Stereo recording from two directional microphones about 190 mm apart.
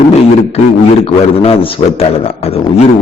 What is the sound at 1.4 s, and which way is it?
A man's voice, 30° left (ahead or behind).